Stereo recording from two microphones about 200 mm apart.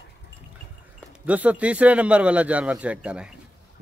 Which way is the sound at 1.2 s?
5° right (ahead or behind).